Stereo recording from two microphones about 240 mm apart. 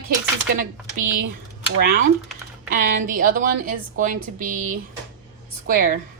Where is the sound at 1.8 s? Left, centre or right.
Right.